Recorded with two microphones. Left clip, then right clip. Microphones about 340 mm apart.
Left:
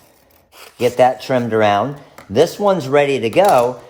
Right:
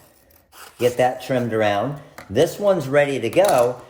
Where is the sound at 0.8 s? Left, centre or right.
Centre.